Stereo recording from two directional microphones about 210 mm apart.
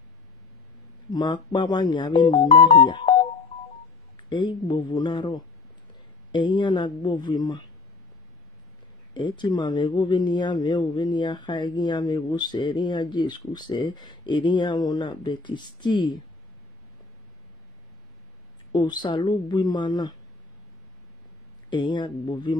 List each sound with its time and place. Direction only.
1.1 s speech: 20° left (ahead or behind)
4.3 s speech: 20° left (ahead or behind)
9.1 s speech: 20° left (ahead or behind)
18.7 s speech: 20° left (ahead or behind)
21.6 s speech: 20° left (ahead or behind)